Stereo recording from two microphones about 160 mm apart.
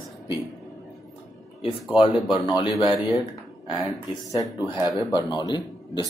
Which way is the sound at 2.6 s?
30° left (ahead or behind).